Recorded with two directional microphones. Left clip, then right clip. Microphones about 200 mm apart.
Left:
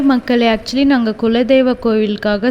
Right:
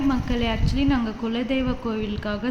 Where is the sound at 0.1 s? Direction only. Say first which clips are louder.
Left 12 dB; 50° left (ahead or behind).